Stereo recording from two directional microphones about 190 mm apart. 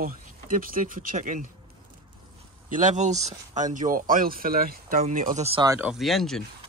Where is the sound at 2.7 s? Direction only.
40° right (ahead or behind).